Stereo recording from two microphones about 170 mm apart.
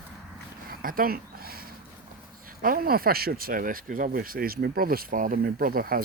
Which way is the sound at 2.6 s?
60° right (ahead or behind).